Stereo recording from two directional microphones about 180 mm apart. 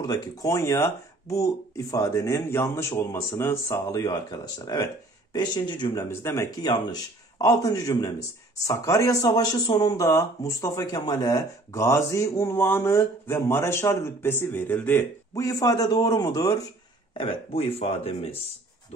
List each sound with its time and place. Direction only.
0.0 s speech: 20° left (ahead or behind)
6.0 s speech: 15° left (ahead or behind)
17.2 s speech: 30° left (ahead or behind)